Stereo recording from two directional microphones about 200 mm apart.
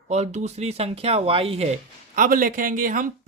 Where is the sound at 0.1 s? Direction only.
35° right (ahead or behind).